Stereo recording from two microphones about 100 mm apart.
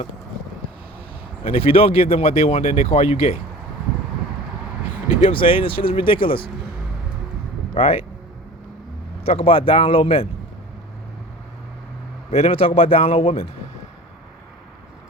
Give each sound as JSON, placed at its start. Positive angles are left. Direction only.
{"t": 1.5, "sound": "speech", "side_deg": 80}
{"t": 5.2, "sound": "speech", "side_deg": 60}
{"t": 7.7, "sound": "speech", "side_deg": 75}
{"t": 9.2, "sound": "a man's voice", "side_deg": 70}
{"t": 12.3, "sound": "a man's voice", "side_deg": 80}